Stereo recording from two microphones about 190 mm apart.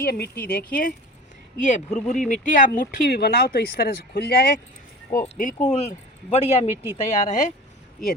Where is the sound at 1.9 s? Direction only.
5° left (ahead or behind).